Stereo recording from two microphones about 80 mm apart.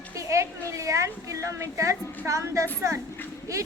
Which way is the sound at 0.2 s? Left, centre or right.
Right.